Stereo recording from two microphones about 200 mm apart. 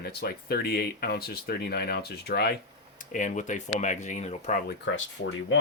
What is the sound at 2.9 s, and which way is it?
Speech, 40° left (ahead or behind).